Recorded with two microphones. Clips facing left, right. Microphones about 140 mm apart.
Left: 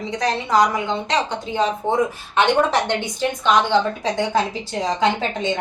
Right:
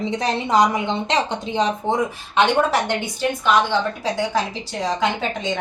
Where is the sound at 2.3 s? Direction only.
10° right (ahead or behind).